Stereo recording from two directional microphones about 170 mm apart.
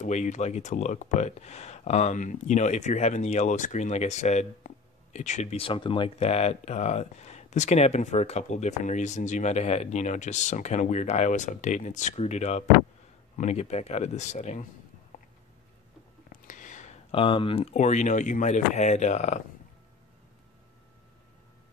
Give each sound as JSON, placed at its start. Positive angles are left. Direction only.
{"t": 0.0, "sound": "speech", "side_deg": 45}
{"t": 16.3, "sound": "a sound", "side_deg": 50}
{"t": 17.1, "sound": "speech", "side_deg": 30}